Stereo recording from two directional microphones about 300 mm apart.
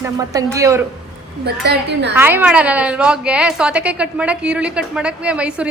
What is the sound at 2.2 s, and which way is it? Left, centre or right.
A woman's voice, centre.